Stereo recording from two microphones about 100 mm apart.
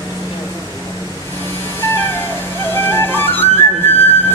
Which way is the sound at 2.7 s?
20° left (ahead or behind).